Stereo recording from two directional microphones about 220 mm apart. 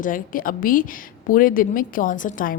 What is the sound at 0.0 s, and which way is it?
A woman's voice, 40° left (ahead or behind).